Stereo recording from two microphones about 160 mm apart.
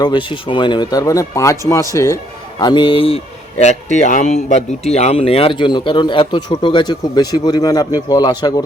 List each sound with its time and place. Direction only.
0.0 s speech: 30° left (ahead or behind)
3.9 s speech: 50° left (ahead or behind); by 8.6 s 25° left (ahead or behind)